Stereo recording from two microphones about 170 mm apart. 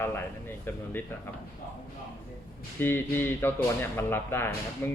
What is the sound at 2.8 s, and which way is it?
Speech, 15° left (ahead or behind).